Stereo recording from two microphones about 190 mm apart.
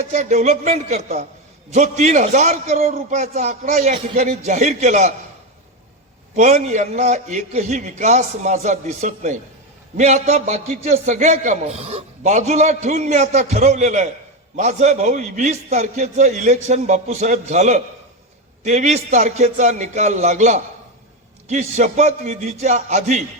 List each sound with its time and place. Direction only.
0.0 s a man's voice: 40° right (ahead or behind)
6.3 s a man's voice: 40° right (ahead or behind)